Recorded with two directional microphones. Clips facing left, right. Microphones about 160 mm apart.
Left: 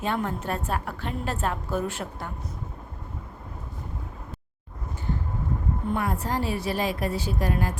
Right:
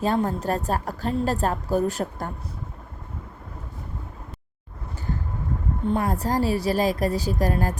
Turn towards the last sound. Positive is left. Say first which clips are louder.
# right 3 dB
turn(degrees=-40)  # may be behind; listen again after turning